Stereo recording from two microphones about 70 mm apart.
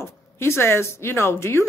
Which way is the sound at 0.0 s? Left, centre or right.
Left.